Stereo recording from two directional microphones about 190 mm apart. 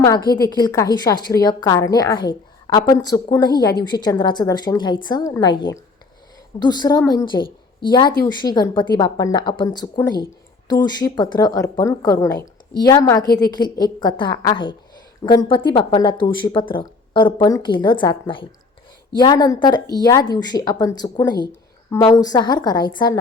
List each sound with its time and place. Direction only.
0.0 s speech: 20° left (ahead or behind)